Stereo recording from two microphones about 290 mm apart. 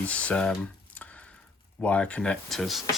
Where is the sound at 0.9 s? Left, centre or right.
Centre.